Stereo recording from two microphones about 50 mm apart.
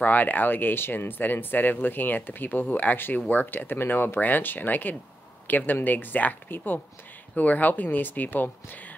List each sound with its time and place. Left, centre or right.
0.0 s speech: left